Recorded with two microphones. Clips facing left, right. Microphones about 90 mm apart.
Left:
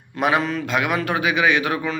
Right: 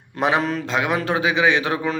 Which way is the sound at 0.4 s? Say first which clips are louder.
Right 1 dB; 40° right (ahead or behind).